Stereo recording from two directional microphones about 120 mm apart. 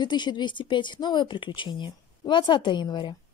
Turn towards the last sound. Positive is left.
turn(degrees=40)  # may be behind; listen again after turning